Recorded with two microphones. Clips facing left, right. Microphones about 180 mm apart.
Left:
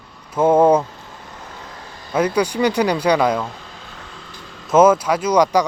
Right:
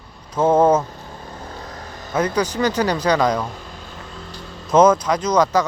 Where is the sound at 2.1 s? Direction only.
10° left (ahead or behind).